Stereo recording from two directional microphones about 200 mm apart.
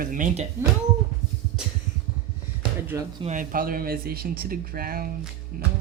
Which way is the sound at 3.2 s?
40° right (ahead or behind).